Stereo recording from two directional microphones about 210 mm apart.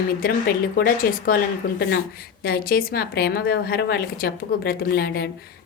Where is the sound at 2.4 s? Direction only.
45° left (ahead or behind).